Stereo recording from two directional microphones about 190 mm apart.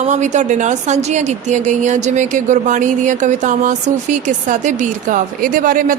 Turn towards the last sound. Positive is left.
turn(degrees=-45)  # may be behind; listen again after turning